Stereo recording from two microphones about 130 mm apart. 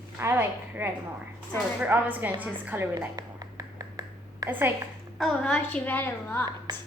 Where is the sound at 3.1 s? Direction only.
30° right (ahead or behind).